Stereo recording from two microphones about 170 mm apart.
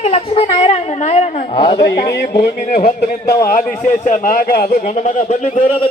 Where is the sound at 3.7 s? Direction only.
45° left (ahead or behind).